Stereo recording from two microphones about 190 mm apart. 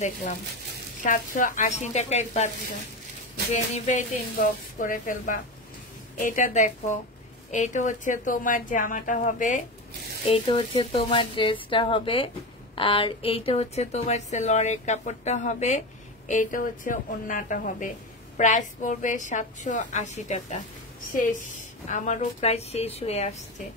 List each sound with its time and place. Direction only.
0.0 s a woman's voice: 40° left (ahead or behind)
3.5 s a woman's voice: 40° left (ahead or behind)
10.2 s a woman's voice: 30° left (ahead or behind)
21.8 s a woman's voice: 40° left (ahead or behind)